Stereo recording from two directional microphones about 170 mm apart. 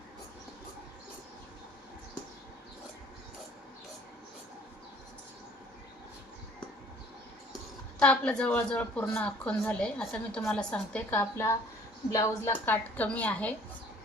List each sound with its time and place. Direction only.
7.9 s a woman's voice: 5° left (ahead or behind)